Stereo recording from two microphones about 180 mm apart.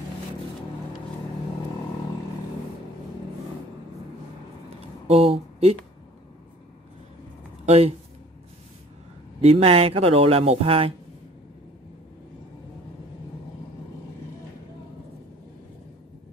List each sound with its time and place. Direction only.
4.6 s a sound: 35° right (ahead or behind)
7.6 s speech: 35° right (ahead or behind)
9.4 s speech: 35° right (ahead or behind)